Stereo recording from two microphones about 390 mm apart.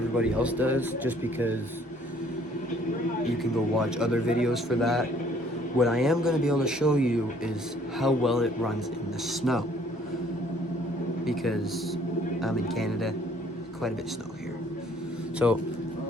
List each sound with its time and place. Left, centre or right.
0.2 s speech: centre
3.8 s speech: centre
12.4 s speech: centre
15.4 s speech: centre